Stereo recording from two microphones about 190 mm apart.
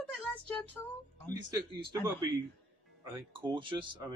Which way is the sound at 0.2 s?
10° left (ahead or behind).